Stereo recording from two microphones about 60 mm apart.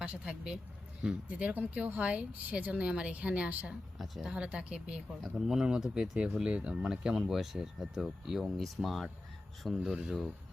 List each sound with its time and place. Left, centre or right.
0.0 s speech: centre
3.9 s speech: centre
4.2 s speech: centre